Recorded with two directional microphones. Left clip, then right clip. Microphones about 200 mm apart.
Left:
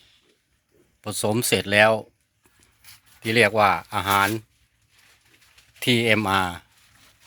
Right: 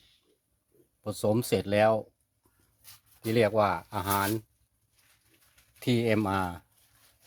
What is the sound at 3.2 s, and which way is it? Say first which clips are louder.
Speech: left 7 dB; centre (ahead or behind).